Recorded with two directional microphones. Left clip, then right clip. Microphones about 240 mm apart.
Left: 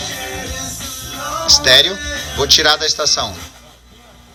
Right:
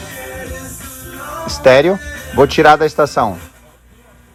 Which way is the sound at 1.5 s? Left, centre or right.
Right.